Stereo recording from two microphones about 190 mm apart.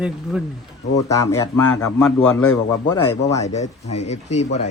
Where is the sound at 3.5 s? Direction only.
35° left (ahead or behind).